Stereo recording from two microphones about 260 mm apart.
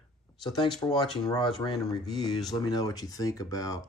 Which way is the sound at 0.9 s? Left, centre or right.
Centre.